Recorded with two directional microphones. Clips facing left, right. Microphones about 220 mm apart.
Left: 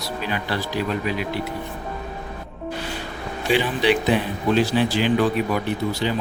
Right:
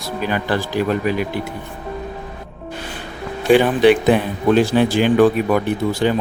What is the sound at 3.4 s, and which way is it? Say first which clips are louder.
Speech: right 8 dB; 50° right (ahead or behind).